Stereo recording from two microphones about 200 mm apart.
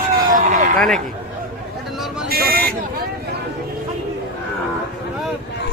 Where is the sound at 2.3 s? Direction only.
50° right (ahead or behind).